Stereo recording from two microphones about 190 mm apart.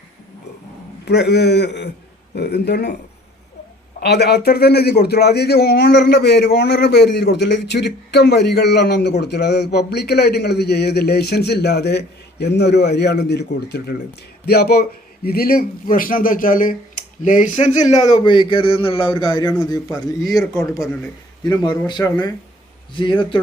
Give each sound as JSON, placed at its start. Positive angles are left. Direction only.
{"t": 1.0, "sound": "a man's voice", "side_deg": 60}
{"t": 4.0, "sound": "a man's voice", "side_deg": 60}
{"t": 18.2, "sound": "speech", "side_deg": 25}
{"t": 20.6, "sound": "speech", "side_deg": 15}